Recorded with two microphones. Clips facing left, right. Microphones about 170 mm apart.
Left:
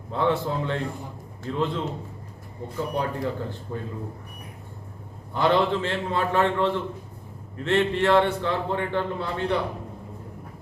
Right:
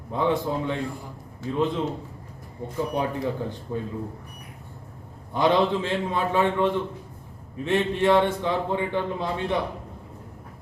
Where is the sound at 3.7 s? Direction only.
15° right (ahead or behind).